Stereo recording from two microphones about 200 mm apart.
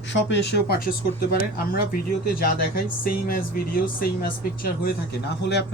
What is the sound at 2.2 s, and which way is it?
Speech, 45° left (ahead or behind).